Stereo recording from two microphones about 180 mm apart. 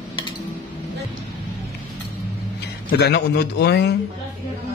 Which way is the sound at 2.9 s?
65° left (ahead or behind).